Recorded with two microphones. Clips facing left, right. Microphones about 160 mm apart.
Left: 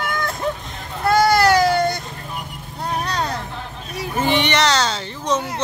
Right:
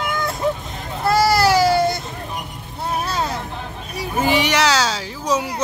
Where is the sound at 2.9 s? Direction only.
5° right (ahead or behind).